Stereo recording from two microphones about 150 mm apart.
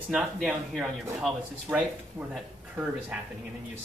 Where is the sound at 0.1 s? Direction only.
Centre (ahead or behind).